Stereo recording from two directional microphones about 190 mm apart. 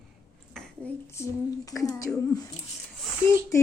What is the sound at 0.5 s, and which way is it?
Speech, 10° left (ahead or behind).